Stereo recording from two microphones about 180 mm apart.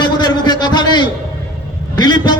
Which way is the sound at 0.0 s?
25° left (ahead or behind).